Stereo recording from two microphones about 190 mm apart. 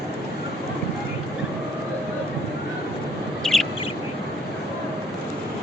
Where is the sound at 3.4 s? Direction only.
5° left (ahead or behind).